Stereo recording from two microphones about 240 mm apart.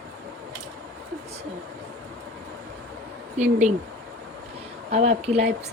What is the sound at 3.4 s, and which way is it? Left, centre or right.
Speech, right.